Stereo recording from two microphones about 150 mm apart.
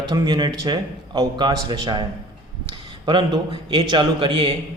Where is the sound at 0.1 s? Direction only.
30° right (ahead or behind).